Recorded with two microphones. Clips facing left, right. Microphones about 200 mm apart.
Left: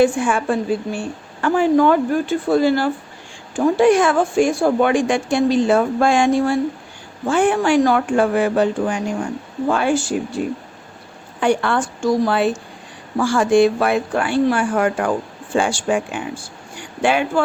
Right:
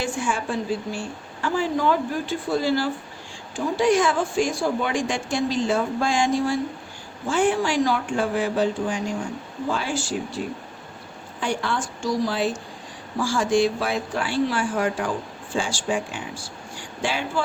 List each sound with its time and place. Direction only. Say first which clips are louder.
0.0 s speech: left 10 dB; 55° left (ahead or behind)
11.3 s speech: left 8 dB; 60° left (ahead or behind)